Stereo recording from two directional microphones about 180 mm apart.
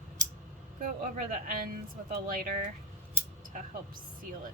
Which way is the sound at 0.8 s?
50° right (ahead or behind).